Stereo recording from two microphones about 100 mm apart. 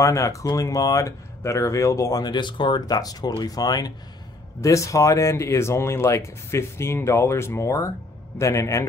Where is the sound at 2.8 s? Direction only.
40° left (ahead or behind).